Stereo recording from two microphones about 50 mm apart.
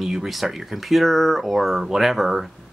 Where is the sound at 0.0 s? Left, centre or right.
Centre.